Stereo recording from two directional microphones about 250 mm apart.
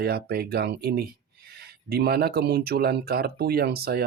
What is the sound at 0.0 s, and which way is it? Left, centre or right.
Speech, right.